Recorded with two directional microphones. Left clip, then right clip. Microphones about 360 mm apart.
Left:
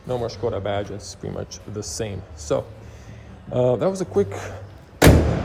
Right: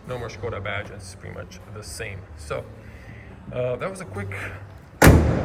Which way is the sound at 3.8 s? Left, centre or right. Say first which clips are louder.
Left 10 dB; centre.